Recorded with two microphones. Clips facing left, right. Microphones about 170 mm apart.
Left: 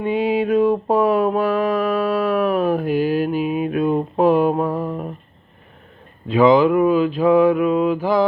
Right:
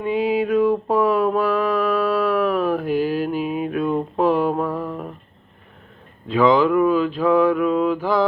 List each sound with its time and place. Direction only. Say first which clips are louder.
0.0 s mantra: left 1 dB; 25° left (ahead or behind)
6.2 s mantra: left 3 dB; 15° left (ahead or behind)